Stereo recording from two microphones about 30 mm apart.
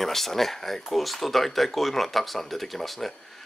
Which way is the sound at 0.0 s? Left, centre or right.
Centre.